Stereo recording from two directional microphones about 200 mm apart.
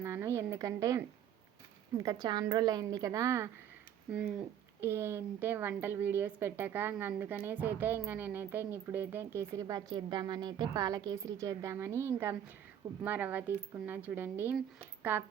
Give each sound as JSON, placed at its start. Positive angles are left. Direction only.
{"t": 0.0, "sound": "a woman's voice", "side_deg": -15}
{"t": 4.8, "sound": "a woman's voice", "side_deg": -10}